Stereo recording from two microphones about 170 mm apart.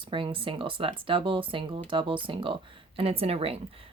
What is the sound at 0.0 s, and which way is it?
Speech, 30° right (ahead or behind).